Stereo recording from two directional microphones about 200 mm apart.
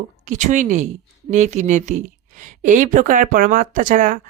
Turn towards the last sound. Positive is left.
turn(degrees=-40)  # may be behind; listen again after turning